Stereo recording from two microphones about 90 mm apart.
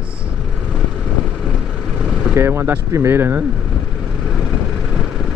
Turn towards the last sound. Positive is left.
turn(degrees=-25)  # may be behind; listen again after turning